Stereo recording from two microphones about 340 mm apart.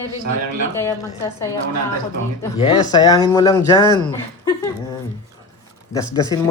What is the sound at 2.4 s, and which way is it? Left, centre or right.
Speech, centre.